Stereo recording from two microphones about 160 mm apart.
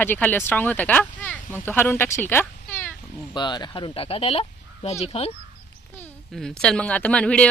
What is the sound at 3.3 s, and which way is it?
Speech, 30° left (ahead or behind).